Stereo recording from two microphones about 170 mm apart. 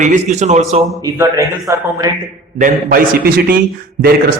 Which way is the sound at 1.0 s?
20° right (ahead or behind).